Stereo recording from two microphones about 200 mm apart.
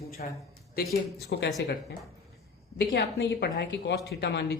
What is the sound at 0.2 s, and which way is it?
Speech, 40° left (ahead or behind).